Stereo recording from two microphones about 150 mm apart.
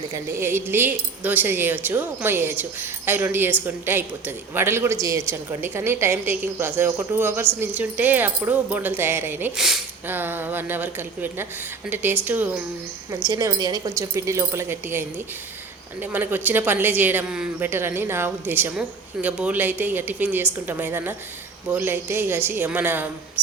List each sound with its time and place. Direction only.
0.1 s a woman's voice: 15° right (ahead or behind)
9.6 s speech: centre (ahead or behind)
10.1 s a woman's voice: 15° right (ahead or behind)
13.1 s a woman's voice: 25° right (ahead or behind)